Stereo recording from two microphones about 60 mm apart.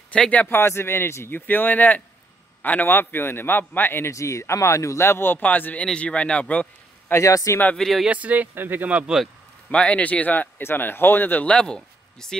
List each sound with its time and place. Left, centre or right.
0.1 s speech: left
0.5 s speech: left
4.0 s speech: left; by 6.7 s centre
7.2 s speech: left
7.7 s speech: centre
8.1 s speech: right
9.7 s speech: centre
10.6 s speech: left
11.4 s speech: centre